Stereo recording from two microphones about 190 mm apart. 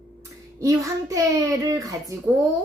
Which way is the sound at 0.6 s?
15° right (ahead or behind).